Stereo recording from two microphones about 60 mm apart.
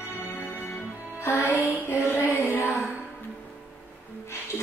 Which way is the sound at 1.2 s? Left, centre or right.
Left.